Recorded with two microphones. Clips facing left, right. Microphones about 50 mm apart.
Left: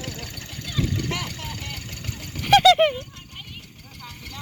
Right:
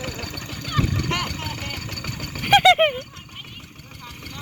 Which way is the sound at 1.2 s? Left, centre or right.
Right.